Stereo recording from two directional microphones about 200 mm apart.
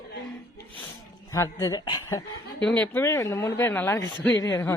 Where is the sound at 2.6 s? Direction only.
5° left (ahead or behind).